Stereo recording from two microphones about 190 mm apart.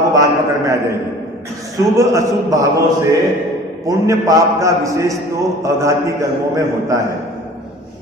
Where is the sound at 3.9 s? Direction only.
15° right (ahead or behind).